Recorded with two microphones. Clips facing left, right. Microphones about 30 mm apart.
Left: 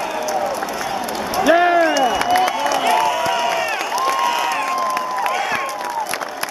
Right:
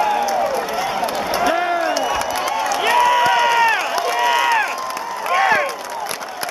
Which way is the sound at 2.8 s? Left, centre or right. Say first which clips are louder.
Right 5 dB; right.